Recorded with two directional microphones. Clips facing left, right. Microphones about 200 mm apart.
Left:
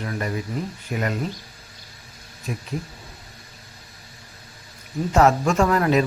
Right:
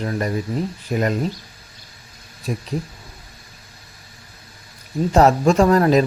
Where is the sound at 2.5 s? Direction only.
35° right (ahead or behind).